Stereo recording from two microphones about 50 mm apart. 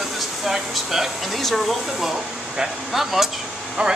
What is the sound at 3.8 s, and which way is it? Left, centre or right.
Speech, right.